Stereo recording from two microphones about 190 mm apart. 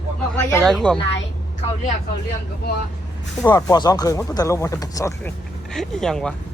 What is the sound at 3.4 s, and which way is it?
Speech, 20° left (ahead or behind).